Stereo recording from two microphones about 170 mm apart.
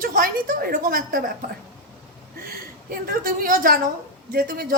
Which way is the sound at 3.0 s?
55° right (ahead or behind).